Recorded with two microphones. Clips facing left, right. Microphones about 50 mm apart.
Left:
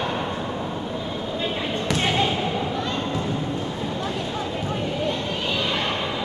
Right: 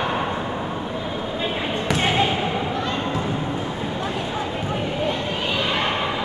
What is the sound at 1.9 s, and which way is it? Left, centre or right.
Basketball bounce, centre.